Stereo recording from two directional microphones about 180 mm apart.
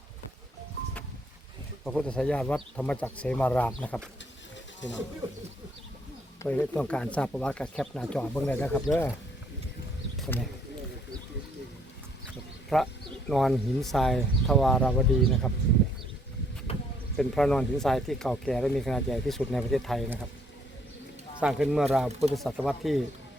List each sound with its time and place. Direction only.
1.8 s speech: 5° left (ahead or behind)
4.8 s speech: 90° left
6.4 s speech: 10° left (ahead or behind)
12.7 s speech: centre (ahead or behind)
16.7 s a sound: 30° left (ahead or behind)
17.2 s speech: 5° left (ahead or behind)
21.4 s speech: 5° right (ahead or behind)